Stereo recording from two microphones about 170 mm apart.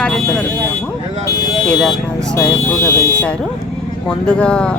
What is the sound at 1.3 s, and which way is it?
Buzzer, 25° left (ahead or behind).